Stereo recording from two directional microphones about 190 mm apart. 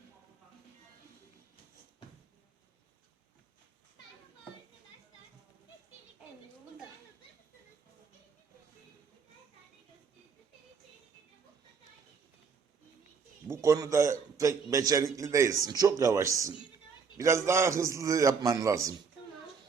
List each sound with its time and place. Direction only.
13.5 s a man's voice: 15° right (ahead or behind)